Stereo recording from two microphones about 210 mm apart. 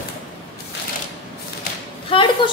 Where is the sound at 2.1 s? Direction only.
25° left (ahead or behind).